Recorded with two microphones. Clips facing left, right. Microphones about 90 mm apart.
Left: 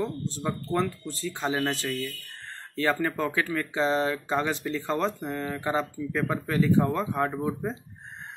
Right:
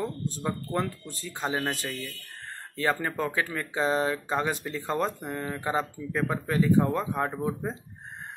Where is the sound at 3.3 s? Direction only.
20° right (ahead or behind).